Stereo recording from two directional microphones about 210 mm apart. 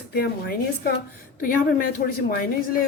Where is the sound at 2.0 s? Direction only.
45° left (ahead or behind).